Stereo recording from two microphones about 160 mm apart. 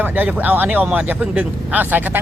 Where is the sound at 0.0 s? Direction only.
10° right (ahead or behind).